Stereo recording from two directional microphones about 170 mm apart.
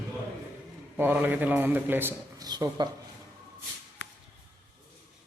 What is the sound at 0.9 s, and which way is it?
A man's voice, 10° right (ahead or behind).